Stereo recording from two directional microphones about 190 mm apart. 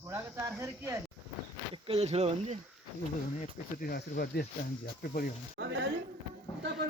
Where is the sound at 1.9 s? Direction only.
30° right (ahead or behind).